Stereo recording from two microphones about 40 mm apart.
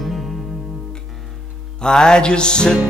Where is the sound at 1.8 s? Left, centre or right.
Centre.